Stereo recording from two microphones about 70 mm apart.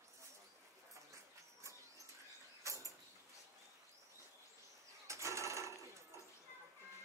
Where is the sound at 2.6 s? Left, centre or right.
Right.